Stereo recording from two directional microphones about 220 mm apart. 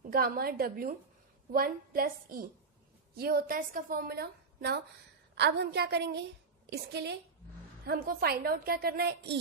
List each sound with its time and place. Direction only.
0.1 s a woman's voice: 45° right (ahead or behind)